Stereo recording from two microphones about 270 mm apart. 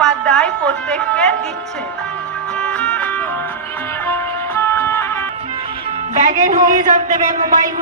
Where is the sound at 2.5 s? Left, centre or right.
Centre.